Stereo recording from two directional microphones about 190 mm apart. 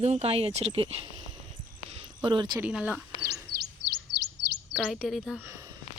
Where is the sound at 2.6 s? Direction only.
5° right (ahead or behind).